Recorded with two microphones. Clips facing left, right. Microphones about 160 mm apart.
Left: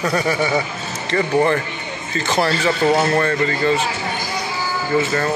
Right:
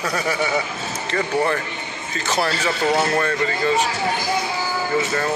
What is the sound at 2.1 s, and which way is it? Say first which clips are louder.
Speech: left 3 dB; 5° right (ahead or behind).